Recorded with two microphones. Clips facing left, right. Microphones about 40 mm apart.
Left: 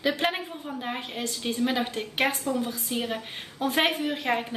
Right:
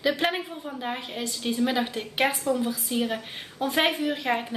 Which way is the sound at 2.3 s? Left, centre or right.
Right.